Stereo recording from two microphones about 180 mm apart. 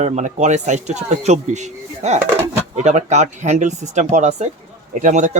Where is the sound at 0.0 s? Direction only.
40° right (ahead or behind).